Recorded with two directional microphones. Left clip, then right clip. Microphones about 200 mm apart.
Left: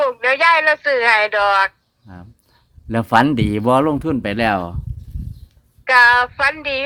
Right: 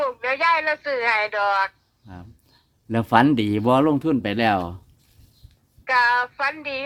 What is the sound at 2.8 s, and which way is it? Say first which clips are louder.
Speech: left 3 dB; 20° left (ahead or behind).